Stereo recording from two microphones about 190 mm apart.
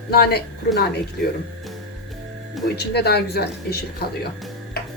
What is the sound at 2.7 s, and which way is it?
A woman's voice, 60° left (ahead or behind).